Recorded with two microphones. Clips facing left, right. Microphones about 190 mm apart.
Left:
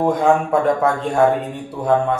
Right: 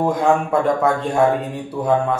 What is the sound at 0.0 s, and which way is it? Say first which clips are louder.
Speech: left 1 dB; centre (ahead or behind).